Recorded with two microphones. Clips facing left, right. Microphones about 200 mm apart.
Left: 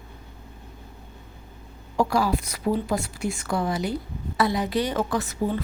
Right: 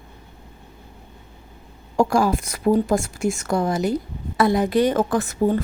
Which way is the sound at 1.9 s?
45° right (ahead or behind).